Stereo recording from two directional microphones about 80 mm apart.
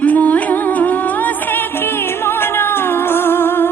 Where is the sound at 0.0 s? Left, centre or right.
Centre.